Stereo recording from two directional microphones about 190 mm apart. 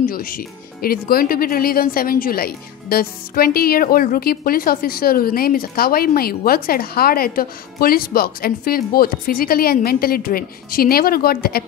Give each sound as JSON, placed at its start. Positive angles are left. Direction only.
{"t": 0.0, "sound": "speech", "side_deg": 50}